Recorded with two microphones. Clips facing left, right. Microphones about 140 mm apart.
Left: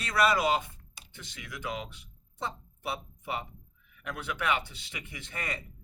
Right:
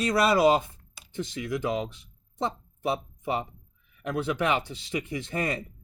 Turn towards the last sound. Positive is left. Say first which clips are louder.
# right 9 dB
turn(degrees=-35)  # may be behind; listen again after turning